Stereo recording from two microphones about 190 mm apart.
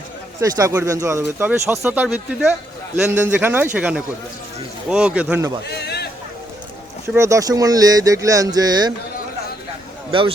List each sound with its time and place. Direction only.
0.5 s speech: 20° right (ahead or behind)
5.6 s a sound: 60° left (ahead or behind)
7.1 s speech: 15° right (ahead or behind)
10.1 s a man's voice: 25° right (ahead or behind)